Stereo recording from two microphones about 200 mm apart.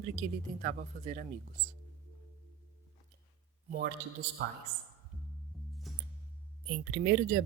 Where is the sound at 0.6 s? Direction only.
45° right (ahead or behind).